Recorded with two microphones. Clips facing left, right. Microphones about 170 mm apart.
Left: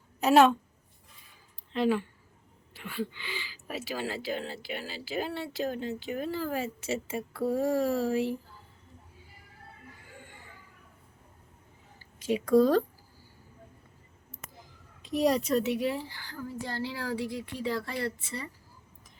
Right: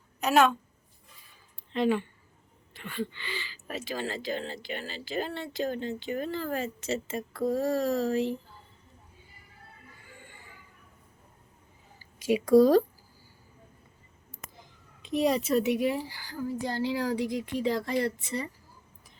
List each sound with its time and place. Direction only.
0.2 s a woman's voice: 30° left (ahead or behind)
1.7 s speech: centre (ahead or behind)
12.2 s a woman's voice: 10° right (ahead or behind)
15.0 s speech: centre (ahead or behind)
15.6 s a woman's voice: 15° right (ahead or behind)